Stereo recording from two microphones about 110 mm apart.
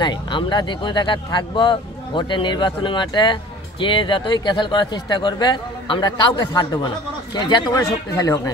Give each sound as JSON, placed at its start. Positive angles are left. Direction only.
{"t": 0.0, "sound": "speech", "side_deg": 45}